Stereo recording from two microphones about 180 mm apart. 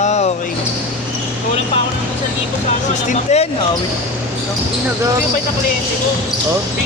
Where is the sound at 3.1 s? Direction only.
35° left (ahead or behind).